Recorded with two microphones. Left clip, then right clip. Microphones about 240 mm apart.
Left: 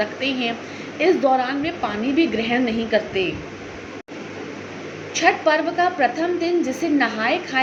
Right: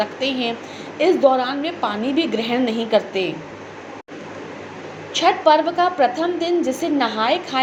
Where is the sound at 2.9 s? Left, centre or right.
Right.